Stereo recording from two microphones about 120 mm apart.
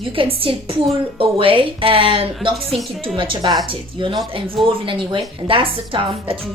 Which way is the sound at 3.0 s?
45° right (ahead or behind).